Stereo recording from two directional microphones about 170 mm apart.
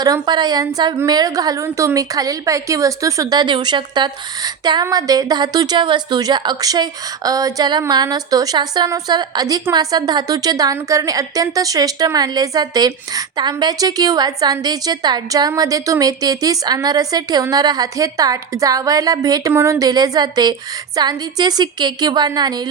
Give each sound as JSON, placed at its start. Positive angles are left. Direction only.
{"t": 0.0, "sound": "a woman's voice", "side_deg": -25}